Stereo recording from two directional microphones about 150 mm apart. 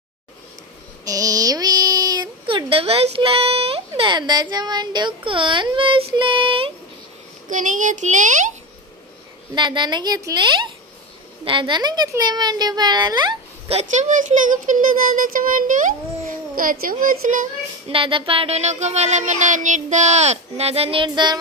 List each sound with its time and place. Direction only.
1.0 s speech: 25° right (ahead or behind)
7.4 s a child's voice: 60° right (ahead or behind)
9.6 s a woman's voice: 30° right (ahead or behind); by 14.0 s 50° right (ahead or behind)
15.1 s a child's voice: 65° right (ahead or behind)
17.8 s child singing: 35° right (ahead or behind)